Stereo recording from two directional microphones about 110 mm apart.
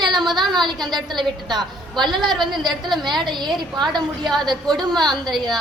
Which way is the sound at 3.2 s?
45° right (ahead or behind).